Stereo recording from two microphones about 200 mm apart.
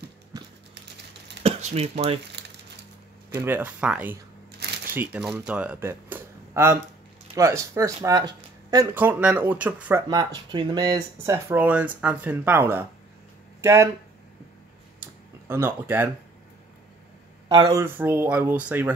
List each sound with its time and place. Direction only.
0.3 s typing: 20° right (ahead or behind)
1.4 s a sound: 30° right (ahead or behind)
2.4 s crumpling: 60° right (ahead or behind)
3.3 s speech: 10° right (ahead or behind)
4.5 s shuffling cards: 55° right (ahead or behind)
4.9 s speech: 10° right (ahead or behind)
10.0 s speech: 20° right (ahead or behind)
15.0 s a sound: 10° right (ahead or behind)
17.5 s speech: 20° right (ahead or behind)